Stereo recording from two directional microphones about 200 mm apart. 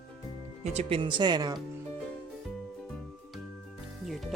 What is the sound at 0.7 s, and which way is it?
Speech, 30° right (ahead or behind).